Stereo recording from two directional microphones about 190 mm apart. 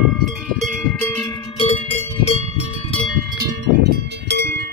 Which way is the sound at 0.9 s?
10° left (ahead or behind).